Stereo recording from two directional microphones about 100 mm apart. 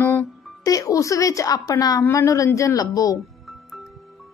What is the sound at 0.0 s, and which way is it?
Music, 20° left (ahead or behind).